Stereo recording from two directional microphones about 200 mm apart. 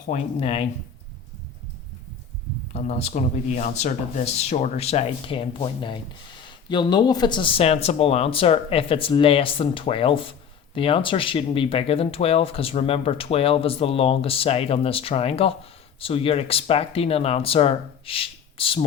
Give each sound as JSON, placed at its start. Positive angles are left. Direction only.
{"t": 0.1, "sound": "speech", "side_deg": 35}
{"t": 2.7, "sound": "speech", "side_deg": 35}